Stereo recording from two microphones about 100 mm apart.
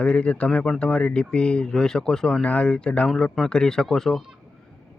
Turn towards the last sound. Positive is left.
turn(degrees=5)  # may be behind; listen again after turning